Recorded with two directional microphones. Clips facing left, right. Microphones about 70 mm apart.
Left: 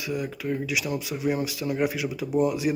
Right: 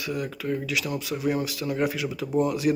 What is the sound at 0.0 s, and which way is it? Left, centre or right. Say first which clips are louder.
Speech: even; centre.